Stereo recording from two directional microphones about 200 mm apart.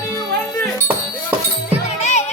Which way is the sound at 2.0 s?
35° left (ahead or behind).